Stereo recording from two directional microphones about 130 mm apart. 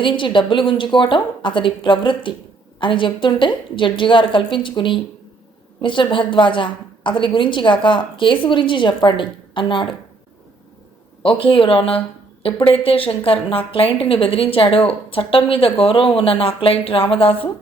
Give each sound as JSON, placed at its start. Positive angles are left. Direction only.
{"t": 0.0, "sound": "a woman's voice", "side_deg": 40}
{"t": 11.2, "sound": "speech", "side_deg": 40}